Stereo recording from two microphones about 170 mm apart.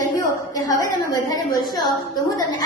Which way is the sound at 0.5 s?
20° left (ahead or behind).